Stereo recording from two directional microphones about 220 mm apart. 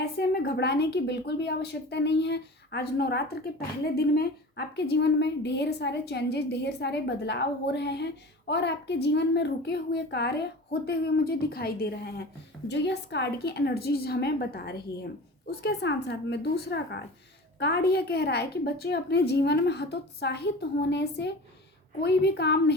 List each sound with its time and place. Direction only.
0.0 s a woman's voice: 45° left (ahead or behind)